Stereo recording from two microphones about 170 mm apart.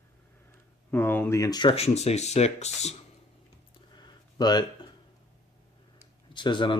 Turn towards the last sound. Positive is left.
turn(degrees=25)  # may be behind; listen again after turning